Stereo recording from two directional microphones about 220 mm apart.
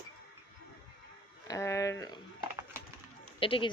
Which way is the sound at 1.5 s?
15° left (ahead or behind).